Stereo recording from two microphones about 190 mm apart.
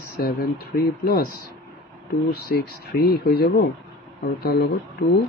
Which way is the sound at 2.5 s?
55° left (ahead or behind).